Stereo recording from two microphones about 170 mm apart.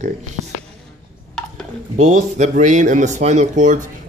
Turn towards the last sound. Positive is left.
turn(degrees=-50)  # may be behind; listen again after turning